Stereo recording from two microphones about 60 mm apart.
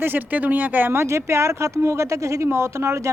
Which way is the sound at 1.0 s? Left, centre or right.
Right.